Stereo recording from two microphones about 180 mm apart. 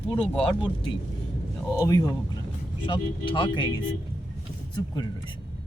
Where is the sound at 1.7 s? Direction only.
20° left (ahead or behind).